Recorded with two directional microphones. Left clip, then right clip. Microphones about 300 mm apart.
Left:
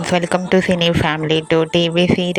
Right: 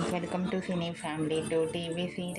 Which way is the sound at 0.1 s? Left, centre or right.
Left.